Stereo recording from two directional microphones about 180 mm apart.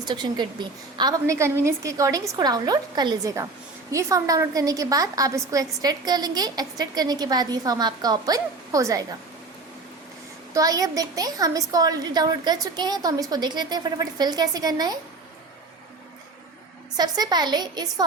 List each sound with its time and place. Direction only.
0.0 s a woman's voice: 25° right (ahead or behind)
10.5 s a woman's voice: 20° right (ahead or behind)
17.0 s a woman's voice: 20° right (ahead or behind)